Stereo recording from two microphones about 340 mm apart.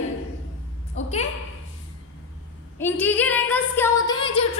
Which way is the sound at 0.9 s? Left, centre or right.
Centre.